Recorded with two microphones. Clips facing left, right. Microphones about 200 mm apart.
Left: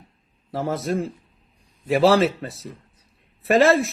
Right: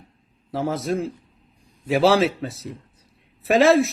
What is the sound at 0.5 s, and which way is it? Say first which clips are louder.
A man's voice: even; centre (ahead or behind).